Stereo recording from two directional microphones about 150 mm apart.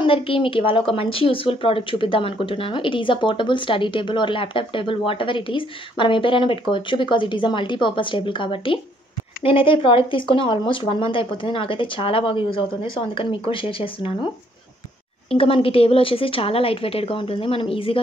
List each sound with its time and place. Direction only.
0.0 s speech: 35° left (ahead or behind)